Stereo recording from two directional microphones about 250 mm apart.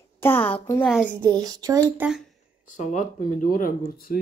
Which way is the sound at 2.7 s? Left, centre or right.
Left.